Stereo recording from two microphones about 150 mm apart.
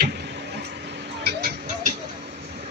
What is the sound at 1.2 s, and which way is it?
Music, 90° right.